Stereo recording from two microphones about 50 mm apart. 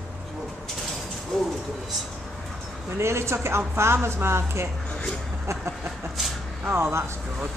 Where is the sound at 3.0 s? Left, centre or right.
Right.